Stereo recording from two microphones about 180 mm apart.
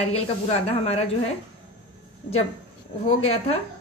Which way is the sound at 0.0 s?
35° left (ahead or behind).